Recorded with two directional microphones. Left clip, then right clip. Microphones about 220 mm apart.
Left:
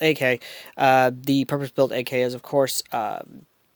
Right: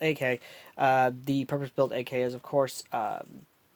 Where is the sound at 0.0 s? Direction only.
40° left (ahead or behind).